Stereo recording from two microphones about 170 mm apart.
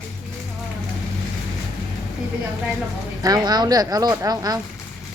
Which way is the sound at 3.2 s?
25° right (ahead or behind).